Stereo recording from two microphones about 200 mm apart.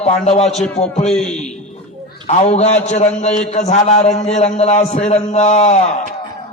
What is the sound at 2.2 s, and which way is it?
A man's voice, 35° left (ahead or behind).